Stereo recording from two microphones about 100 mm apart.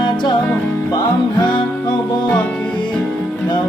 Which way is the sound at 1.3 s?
50° left (ahead or behind).